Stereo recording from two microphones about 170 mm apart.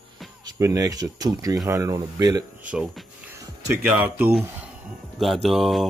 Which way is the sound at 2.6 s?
5° right (ahead or behind).